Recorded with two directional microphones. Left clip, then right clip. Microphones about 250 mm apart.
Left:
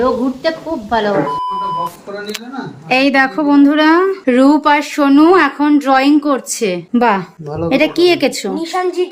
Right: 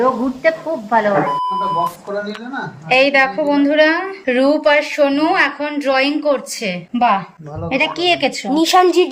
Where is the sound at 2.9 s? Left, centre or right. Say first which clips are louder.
Even; centre.